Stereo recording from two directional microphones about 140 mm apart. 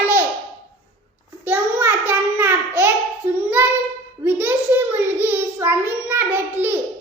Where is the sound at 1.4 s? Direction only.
15° right (ahead or behind).